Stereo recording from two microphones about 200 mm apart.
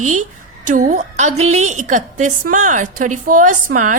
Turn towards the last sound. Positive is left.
turn(degrees=-40)  # may be behind; listen again after turning